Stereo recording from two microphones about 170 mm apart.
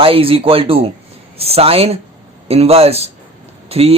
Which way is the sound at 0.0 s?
35° right (ahead or behind).